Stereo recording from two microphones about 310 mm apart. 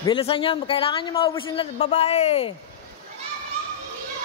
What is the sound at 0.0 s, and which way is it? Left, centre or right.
A man's voice, centre.